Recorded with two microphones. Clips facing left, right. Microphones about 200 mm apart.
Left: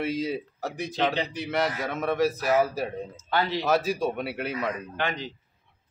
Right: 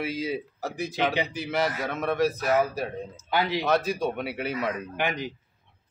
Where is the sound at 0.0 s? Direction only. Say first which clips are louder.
Left 1 dB; centre (ahead or behind).